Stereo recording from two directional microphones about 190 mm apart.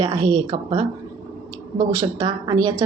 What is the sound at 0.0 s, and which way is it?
A woman's voice, 25° right (ahead or behind).